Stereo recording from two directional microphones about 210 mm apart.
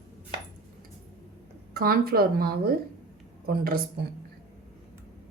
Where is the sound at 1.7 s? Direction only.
45° right (ahead or behind).